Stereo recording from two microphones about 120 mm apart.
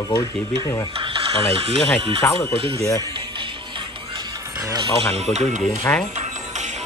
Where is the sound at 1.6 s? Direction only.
55° right (ahead or behind).